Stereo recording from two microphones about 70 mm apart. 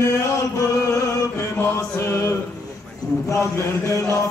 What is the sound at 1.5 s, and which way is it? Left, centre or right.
Mantra, left.